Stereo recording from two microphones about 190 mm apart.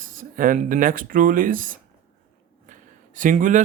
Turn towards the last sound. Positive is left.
turn(degrees=-40)  # may be behind; listen again after turning